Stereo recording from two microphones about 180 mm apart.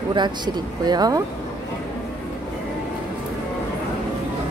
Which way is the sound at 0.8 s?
20° right (ahead or behind).